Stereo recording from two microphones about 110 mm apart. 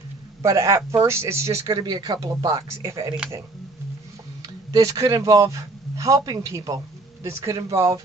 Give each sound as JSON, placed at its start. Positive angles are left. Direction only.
{"t": 0.4, "sound": "speech", "side_deg": -25}
{"t": 1.6, "sound": "speech", "side_deg": -45}
{"t": 4.4, "sound": "speech", "side_deg": -35}